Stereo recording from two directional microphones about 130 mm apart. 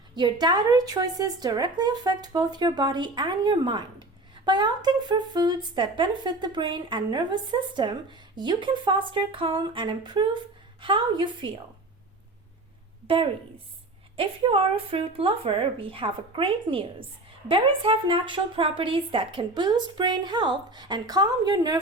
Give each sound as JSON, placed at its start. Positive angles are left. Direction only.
{"t": 0.2, "sound": "speech", "side_deg": -30}
{"t": 14.2, "sound": "speech", "side_deg": -45}